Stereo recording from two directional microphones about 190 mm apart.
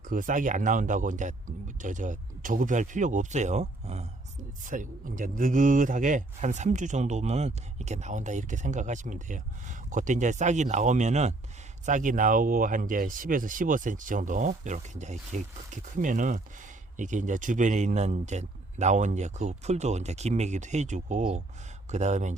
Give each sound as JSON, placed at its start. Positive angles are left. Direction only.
{"t": 0.1, "sound": "speech", "side_deg": -45}